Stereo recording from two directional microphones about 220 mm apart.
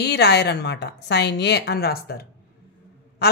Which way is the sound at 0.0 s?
50° left (ahead or behind).